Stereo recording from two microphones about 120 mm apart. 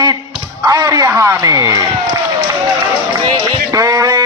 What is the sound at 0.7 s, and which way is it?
A man's voice, 30° right (ahead or behind).